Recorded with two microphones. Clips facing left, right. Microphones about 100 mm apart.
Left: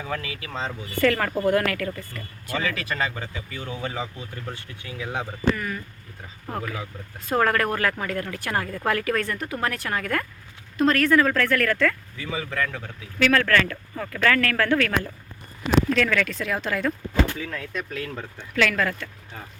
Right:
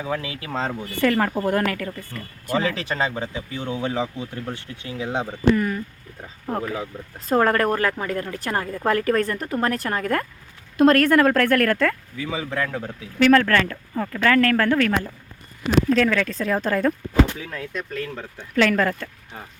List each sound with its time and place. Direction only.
0.0 s speech: 15° right (ahead or behind)
0.3 s speech: 30° right (ahead or behind)
0.6 s speech: 45° right (ahead or behind)
1.0 s speech: 10° right (ahead or behind)
2.5 s speech: 30° right (ahead or behind)
8.9 s speech: 30° right (ahead or behind)
10.8 s speech: 50° right (ahead or behind)
12.2 s speech: 15° right (ahead or behind); by 16.9 s 40° right (ahead or behind)
17.5 s speech: centre (ahead or behind)
18.5 s speech: 30° right (ahead or behind)